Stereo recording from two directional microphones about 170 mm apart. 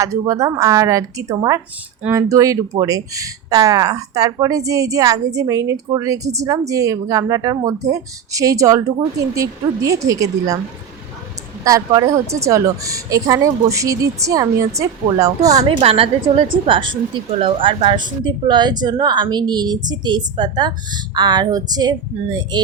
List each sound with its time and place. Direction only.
0.0 s speech: 20° right (ahead or behind)
11.6 s speech: 20° right (ahead or behind)
15.6 s speech: 35° right (ahead or behind)